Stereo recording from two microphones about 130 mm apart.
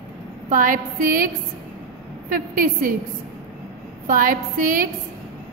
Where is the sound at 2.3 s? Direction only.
90° right.